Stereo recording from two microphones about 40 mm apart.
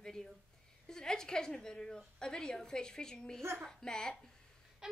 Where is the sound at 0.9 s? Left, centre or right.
Centre.